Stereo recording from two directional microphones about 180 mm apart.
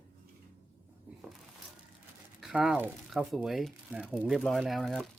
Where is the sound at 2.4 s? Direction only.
5° right (ahead or behind).